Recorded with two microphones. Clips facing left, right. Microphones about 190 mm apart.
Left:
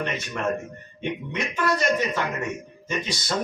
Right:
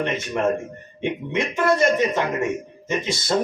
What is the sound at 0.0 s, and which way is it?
A man's voice, 25° right (ahead or behind).